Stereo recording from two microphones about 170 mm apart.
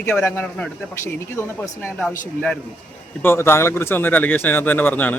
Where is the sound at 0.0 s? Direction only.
15° left (ahead or behind).